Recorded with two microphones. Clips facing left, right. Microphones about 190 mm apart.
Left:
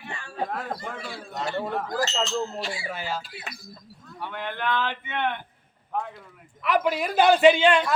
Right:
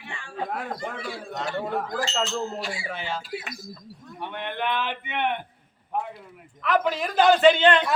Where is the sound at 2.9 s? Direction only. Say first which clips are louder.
Even; 5° left (ahead or behind).